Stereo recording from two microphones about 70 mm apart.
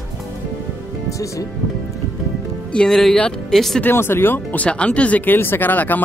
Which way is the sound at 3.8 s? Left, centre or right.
Left.